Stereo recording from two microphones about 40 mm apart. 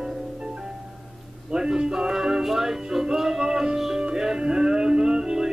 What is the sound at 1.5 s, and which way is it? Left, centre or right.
Music, centre.